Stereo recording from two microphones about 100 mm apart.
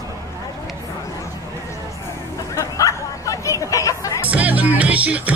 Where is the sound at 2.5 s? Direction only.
35° left (ahead or behind).